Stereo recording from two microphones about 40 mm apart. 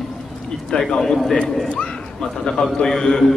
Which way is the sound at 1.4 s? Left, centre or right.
Centre.